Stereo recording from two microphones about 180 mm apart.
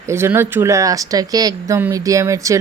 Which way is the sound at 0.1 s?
15° right (ahead or behind).